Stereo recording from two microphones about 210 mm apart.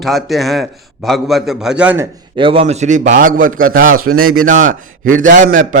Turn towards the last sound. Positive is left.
turn(degrees=-35)  # may be behind; listen again after turning